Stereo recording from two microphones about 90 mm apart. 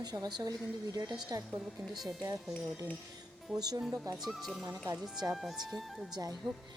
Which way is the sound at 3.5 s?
45° right (ahead or behind).